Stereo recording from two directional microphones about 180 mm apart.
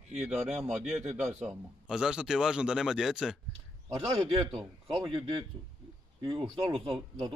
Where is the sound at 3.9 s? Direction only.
25° right (ahead or behind).